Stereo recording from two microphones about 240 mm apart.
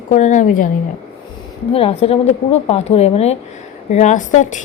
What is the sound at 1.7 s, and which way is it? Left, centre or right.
A woman's voice, left.